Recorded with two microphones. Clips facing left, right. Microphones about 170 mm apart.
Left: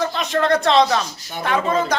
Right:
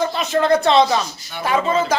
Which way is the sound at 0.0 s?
5° right (ahead or behind).